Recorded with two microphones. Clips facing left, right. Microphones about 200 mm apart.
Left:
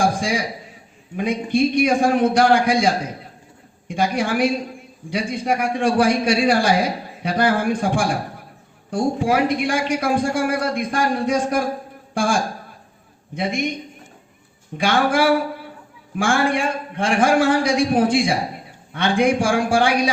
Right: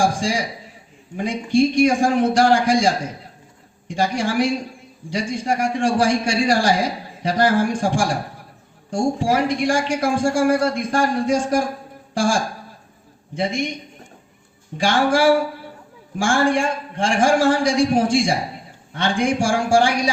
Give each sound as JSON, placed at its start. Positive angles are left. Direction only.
{"t": 0.0, "sound": "a man's voice", "side_deg": 60}
{"t": 4.1, "sound": "a man's voice", "side_deg": 60}
{"t": 13.4, "sound": "a man's voice", "side_deg": 60}
{"t": 14.8, "sound": "a man's voice", "side_deg": 55}